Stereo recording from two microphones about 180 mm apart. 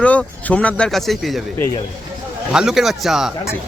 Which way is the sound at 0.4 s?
5° left (ahead or behind).